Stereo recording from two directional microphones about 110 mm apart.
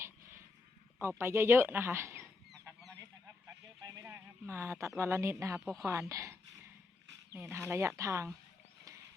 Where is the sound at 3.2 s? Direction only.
30° right (ahead or behind).